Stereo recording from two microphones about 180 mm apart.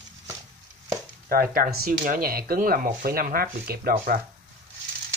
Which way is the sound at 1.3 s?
55° right (ahead or behind).